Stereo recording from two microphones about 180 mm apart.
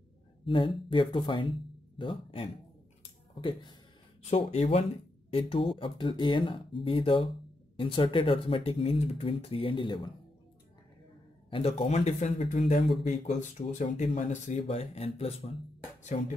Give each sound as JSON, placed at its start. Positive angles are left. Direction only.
{"t": 0.5, "sound": "speech", "side_deg": 25}
{"t": 11.5, "sound": "speech", "side_deg": 30}
{"t": 16.0, "sound": "music", "side_deg": 40}